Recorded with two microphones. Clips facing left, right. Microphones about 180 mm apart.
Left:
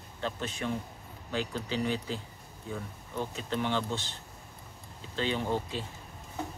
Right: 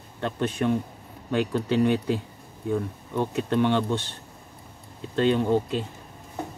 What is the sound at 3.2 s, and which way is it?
Speech, 65° right (ahead or behind).